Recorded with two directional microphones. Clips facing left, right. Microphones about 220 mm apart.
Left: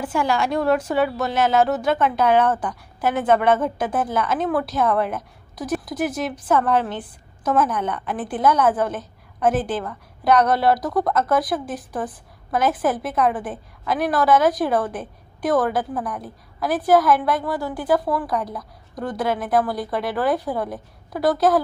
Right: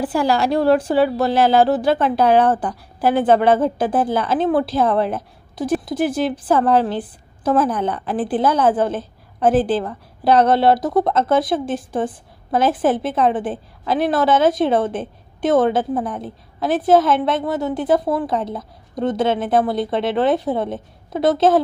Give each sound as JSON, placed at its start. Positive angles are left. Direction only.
{"t": 0.0, "sound": "a woman's voice", "side_deg": -35}